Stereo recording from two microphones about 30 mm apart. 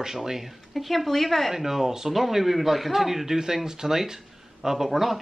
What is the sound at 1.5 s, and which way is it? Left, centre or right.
Speech, centre.